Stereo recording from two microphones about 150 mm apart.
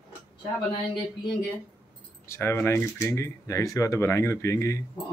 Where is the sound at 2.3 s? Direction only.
15° left (ahead or behind).